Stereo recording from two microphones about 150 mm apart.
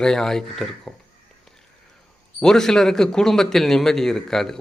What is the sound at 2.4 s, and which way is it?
A man's voice, 5° left (ahead or behind).